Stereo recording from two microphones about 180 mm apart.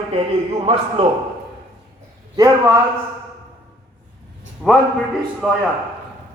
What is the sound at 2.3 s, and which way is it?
Speech, 20° right (ahead or behind).